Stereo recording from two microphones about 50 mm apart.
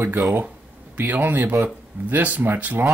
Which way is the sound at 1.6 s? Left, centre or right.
Right.